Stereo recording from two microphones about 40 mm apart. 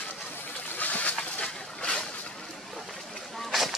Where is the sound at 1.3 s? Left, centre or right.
Left.